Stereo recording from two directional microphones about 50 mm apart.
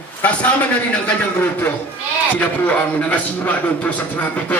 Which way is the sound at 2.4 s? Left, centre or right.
Left.